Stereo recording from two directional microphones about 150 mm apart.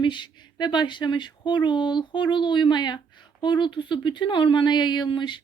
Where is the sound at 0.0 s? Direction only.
30° left (ahead or behind).